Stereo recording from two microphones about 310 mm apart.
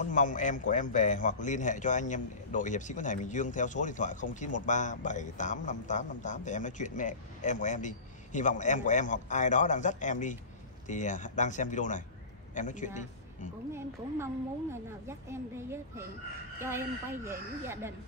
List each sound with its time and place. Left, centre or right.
0.0 s a man's voice: left
13.7 s a woman's voice: centre